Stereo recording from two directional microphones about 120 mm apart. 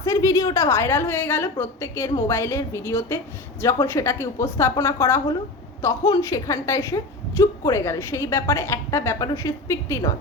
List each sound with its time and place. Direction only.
0.0 s a woman's voice: 25° left (ahead or behind)